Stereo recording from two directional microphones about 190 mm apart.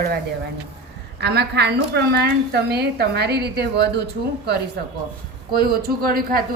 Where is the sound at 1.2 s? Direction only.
60° right (ahead or behind).